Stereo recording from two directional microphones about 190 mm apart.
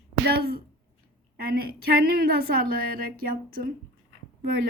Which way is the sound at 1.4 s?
55° right (ahead or behind).